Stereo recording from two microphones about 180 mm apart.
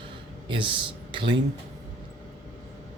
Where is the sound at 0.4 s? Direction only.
25° right (ahead or behind).